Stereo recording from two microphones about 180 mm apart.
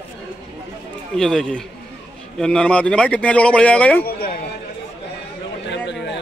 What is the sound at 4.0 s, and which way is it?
Speech, 55° left (ahead or behind).